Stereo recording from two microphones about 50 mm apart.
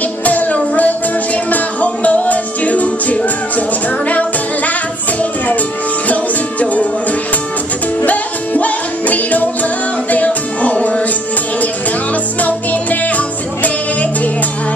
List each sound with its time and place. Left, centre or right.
0.2 s music: left
6.6 s music: left